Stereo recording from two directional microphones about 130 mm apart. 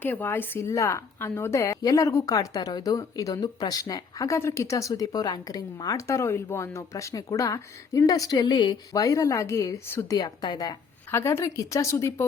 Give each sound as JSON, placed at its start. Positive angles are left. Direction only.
{"t": 0.0, "sound": "a woman's voice", "side_deg": 15}
{"t": 11.1, "sound": "a woman's voice", "side_deg": 20}